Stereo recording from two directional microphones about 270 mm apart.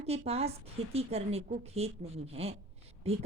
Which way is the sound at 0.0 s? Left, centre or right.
Right.